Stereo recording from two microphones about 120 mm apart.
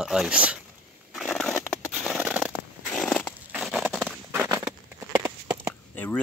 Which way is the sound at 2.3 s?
10° right (ahead or behind).